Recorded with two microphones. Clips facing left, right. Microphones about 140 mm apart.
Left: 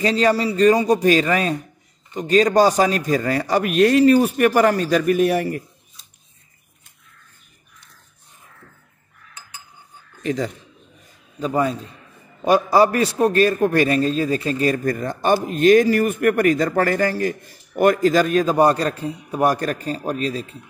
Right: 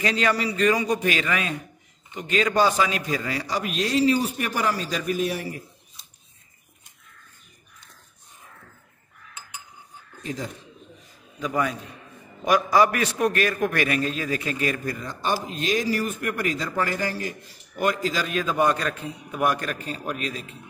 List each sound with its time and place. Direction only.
0.0 s a man's voice: 30° left (ahead or behind); by 5.6 s 60° left (ahead or behind)
10.2 s speech: 75° left (ahead or behind)
11.3 s a man's voice: 30° left (ahead or behind)
14.9 s speech: 50° left (ahead or behind); by 20.4 s 35° left (ahead or behind)